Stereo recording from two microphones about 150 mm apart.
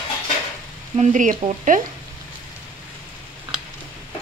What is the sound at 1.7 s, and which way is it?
Speech, 65° right (ahead or behind).